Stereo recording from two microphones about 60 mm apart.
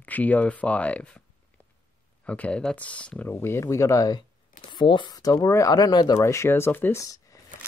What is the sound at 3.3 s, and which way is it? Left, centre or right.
Speech, left.